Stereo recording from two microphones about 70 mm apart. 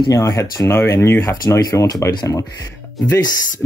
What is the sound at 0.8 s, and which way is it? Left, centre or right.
Speech, left.